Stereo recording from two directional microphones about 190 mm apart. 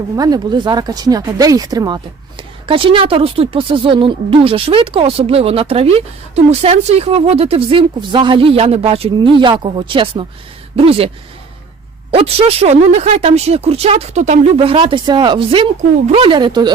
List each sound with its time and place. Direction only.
0.2 s speech: 20° right (ahead or behind)
12.1 s speech: 30° right (ahead or behind)